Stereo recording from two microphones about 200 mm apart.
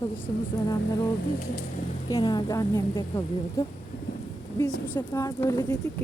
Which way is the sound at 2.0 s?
20° left (ahead or behind).